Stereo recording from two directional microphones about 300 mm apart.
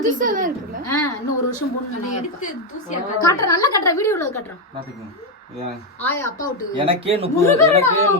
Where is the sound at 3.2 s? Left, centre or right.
Centre.